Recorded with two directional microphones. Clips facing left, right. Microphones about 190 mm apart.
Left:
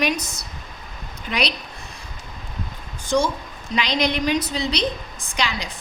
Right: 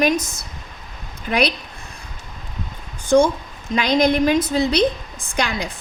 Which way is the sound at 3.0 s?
55° right (ahead or behind).